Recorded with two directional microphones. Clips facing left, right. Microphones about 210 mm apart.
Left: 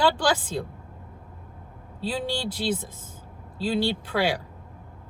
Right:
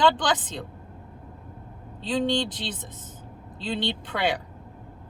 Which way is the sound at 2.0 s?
10° left (ahead or behind).